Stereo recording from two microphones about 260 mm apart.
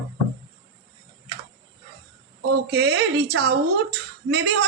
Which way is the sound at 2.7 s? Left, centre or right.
Right.